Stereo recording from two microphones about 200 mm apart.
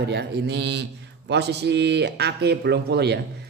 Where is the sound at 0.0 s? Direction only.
55° right (ahead or behind).